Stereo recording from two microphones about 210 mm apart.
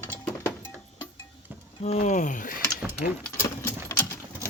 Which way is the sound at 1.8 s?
35° left (ahead or behind).